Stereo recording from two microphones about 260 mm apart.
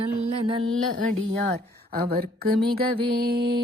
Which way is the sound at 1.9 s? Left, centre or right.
Right.